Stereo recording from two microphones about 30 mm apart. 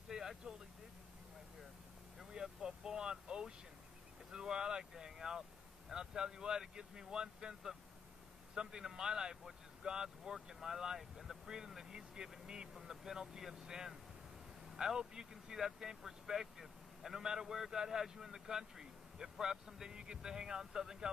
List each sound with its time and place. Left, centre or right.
0.1 s vehicle: centre
2.6 s vehicle: right
4.3 s a man's voice: right
8.7 s speech: centre
9.3 s a man's voice: centre
9.8 s speech: right
12.7 s a man's voice: centre
15.0 s speech: right
15.5 s a man's voice: centre
17.1 s a man's voice: right